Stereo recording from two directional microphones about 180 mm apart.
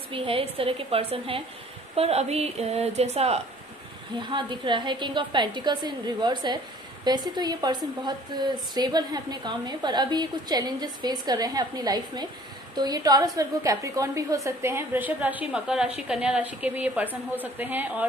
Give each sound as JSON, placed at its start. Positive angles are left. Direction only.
{"t": 0.1, "sound": "a woman's voice", "side_deg": -30}